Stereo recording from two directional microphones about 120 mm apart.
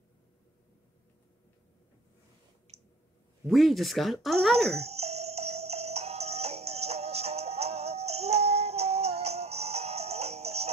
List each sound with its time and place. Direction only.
3.4 s speech: centre (ahead or behind)
4.7 s music: 60° right (ahead or behind)